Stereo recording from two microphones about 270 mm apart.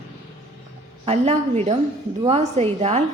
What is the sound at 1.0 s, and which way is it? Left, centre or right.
A woman's voice, right.